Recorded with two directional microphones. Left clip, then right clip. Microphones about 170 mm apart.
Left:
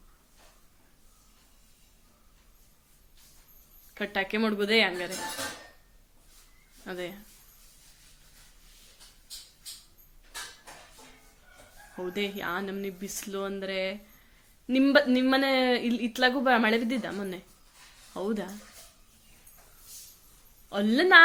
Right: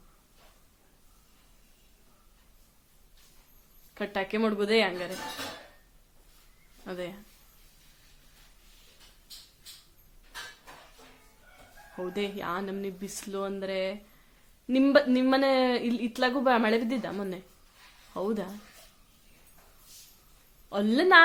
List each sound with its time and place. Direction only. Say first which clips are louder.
3.9 s speech: left 1 dB; 15° right (ahead or behind)
6.8 s speech: even; 15° right (ahead or behind)
11.9 s speech: left 1 dB; 15° right (ahead or behind)
20.7 s speech: even; 15° right (ahead or behind)